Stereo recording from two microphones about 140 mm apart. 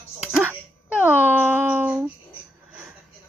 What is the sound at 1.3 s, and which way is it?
Speech, 15° right (ahead or behind).